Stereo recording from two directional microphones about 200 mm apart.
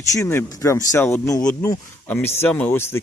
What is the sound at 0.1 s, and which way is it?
Speech, 15° left (ahead or behind).